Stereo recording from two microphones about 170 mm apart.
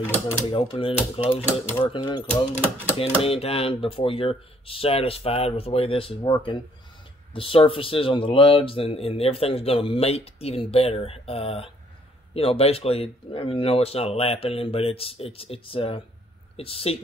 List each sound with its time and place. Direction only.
0.0 s speech: 15° left (ahead or behind)
0.5 s speech: 30° left (ahead or behind)